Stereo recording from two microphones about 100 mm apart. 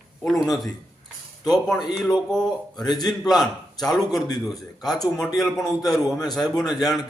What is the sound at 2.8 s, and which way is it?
Speech, 40° left (ahead or behind).